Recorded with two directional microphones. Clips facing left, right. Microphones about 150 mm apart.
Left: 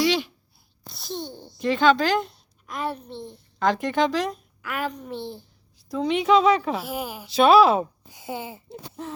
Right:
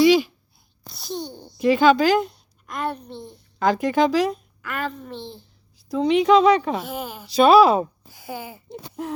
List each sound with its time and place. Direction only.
0.0 s a sound: 5° right (ahead or behind)
0.9 s a child's voice: centre (ahead or behind)
5.7 s speech: centre (ahead or behind)
8.0 s speech: 20° left (ahead or behind)